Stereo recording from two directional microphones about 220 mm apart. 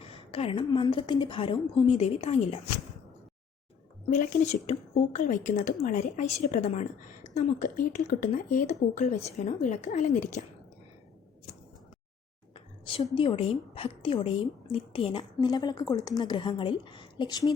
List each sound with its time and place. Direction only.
0.0 s a woman's voice: 25° left (ahead or behind)
4.1 s a woman's voice: 35° left (ahead or behind)
12.5 s a woman's voice: 25° left (ahead or behind)